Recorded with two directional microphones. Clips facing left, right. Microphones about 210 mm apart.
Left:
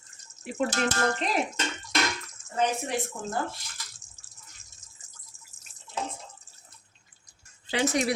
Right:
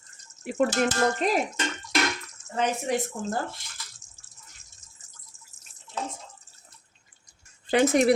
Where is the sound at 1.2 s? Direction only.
45° right (ahead or behind).